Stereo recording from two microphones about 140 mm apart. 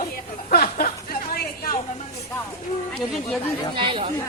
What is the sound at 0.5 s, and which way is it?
Chuckle, 90° left.